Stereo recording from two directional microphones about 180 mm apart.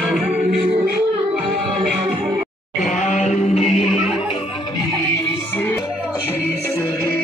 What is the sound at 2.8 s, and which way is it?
Music, 45° left (ahead or behind).